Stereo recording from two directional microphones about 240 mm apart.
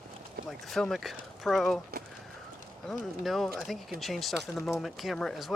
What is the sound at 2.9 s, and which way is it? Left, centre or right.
Speech, centre.